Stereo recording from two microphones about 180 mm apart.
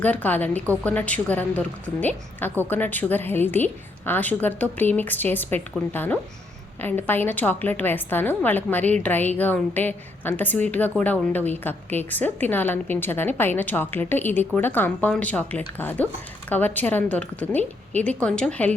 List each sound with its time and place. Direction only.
0.0 s a woman's voice: 10° left (ahead or behind)